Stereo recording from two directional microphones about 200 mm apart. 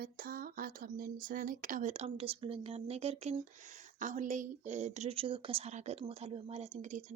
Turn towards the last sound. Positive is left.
turn(degrees=-35)  # may be behind; listen again after turning